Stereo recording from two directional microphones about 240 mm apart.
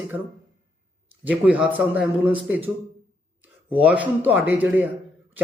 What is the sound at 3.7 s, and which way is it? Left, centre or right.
Speech, centre.